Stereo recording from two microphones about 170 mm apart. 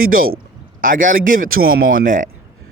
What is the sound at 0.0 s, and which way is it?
Speech, 60° right (ahead or behind).